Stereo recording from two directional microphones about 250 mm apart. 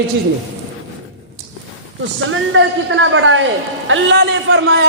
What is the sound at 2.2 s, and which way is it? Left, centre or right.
A man's voice, right.